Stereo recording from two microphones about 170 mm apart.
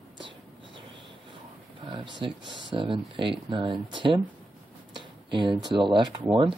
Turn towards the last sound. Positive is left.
turn(degrees=-25)  # may be behind; listen again after turning